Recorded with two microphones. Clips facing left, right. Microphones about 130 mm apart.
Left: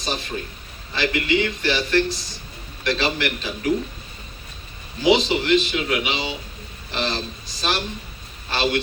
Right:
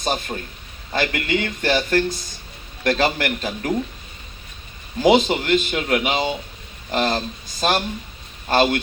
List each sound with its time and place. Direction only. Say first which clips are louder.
0.0 s a man's voice: right 3 dB; 50° right (ahead or behind)
5.0 s a man's voice: right 2 dB; 50° right (ahead or behind)